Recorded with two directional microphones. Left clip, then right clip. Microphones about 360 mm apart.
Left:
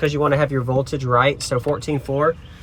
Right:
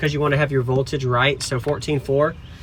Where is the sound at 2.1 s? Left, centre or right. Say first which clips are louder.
Right 3 dB; left.